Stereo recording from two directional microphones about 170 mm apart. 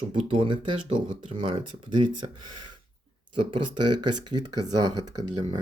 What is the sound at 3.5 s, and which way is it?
Speech, 25° right (ahead or behind).